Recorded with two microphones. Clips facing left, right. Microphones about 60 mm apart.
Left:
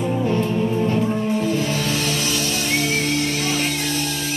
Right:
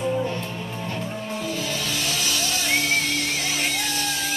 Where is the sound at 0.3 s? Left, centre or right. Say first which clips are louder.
Left 10 dB; left.